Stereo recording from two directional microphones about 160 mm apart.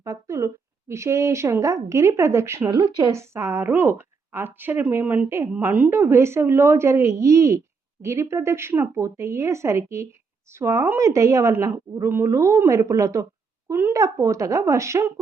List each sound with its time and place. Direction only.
0.0 s speech: 20° right (ahead or behind)
2.6 s speech: 30° right (ahead or behind)
3.1 s a woman's voice: 15° right (ahead or behind)